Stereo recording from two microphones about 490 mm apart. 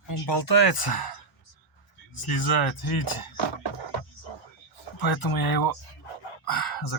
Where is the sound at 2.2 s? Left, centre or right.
Left.